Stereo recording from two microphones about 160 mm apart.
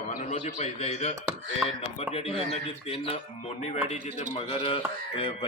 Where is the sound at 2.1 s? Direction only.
40° left (ahead or behind).